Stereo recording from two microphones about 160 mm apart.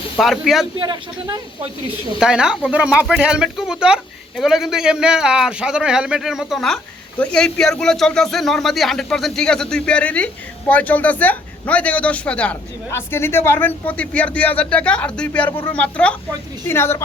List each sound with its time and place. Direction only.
0.2 s a woman's voice: centre (ahead or behind)
0.8 s speech: 25° right (ahead or behind)
2.1 s a woman's voice: 5° right (ahead or behind); by 17.0 s 15° left (ahead or behind)